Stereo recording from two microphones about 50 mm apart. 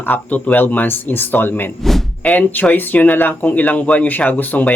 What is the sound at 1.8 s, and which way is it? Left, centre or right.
Speech, centre.